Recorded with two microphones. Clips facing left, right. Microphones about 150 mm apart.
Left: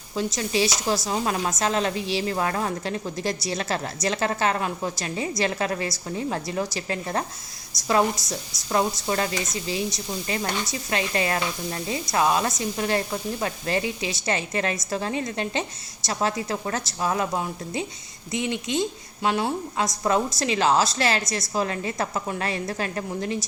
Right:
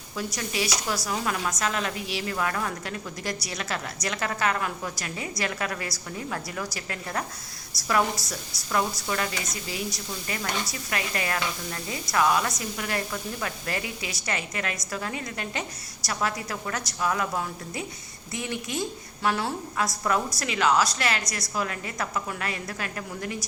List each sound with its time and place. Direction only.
0.2 s a woman's voice: 25° left (ahead or behind)